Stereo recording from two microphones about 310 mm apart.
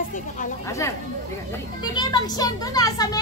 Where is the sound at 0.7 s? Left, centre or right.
Centre.